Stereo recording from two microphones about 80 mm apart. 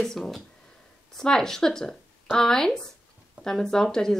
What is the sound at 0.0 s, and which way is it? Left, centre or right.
Speech, centre.